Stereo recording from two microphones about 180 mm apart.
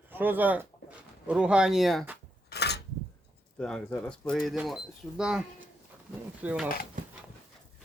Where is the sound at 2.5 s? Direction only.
70° left (ahead or behind).